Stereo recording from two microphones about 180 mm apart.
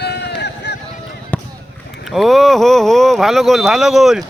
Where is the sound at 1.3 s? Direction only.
10° left (ahead or behind).